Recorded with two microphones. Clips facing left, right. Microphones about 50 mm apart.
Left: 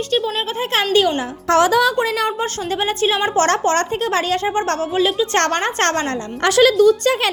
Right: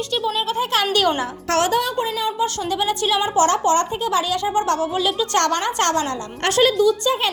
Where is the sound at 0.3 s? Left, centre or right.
Left.